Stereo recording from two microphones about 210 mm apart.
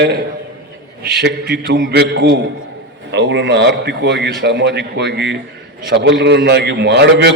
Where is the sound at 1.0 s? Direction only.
50° right (ahead or behind).